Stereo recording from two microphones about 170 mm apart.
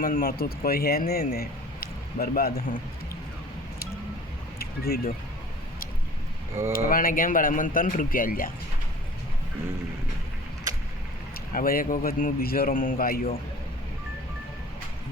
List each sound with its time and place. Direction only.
0.0 s speech: 55° left (ahead or behind)
4.6 s speech: 65° left (ahead or behind)
6.7 s speech: 55° left (ahead or behind)
11.5 s speech: 55° left (ahead or behind)